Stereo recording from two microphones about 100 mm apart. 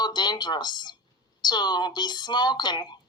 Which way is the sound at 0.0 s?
45° left (ahead or behind).